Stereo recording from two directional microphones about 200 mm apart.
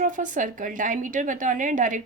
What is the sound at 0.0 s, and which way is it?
A woman's voice, 40° right (ahead or behind).